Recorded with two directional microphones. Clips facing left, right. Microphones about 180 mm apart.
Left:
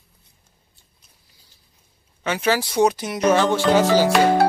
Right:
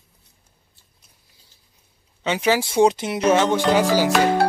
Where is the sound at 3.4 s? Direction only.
15° right (ahead or behind).